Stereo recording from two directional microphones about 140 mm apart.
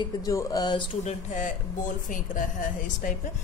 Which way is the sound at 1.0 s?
60° left (ahead or behind).